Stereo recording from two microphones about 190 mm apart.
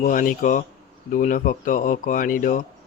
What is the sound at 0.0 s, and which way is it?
Speech, 45° left (ahead or behind).